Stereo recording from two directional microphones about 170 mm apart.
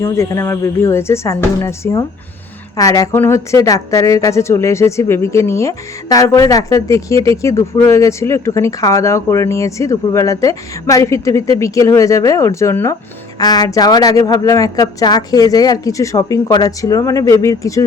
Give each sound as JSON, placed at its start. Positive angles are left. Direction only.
{"t": 0.0, "sound": "a woman's voice", "side_deg": 15}